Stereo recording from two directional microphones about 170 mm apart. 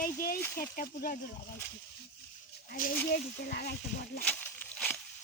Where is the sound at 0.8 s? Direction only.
60° left (ahead or behind).